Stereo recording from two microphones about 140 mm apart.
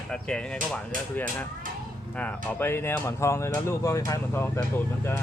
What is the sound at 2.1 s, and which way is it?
Speech, 10° left (ahead or behind).